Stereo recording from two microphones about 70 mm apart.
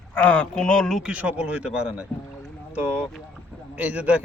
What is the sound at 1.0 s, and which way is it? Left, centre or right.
A man's voice, centre.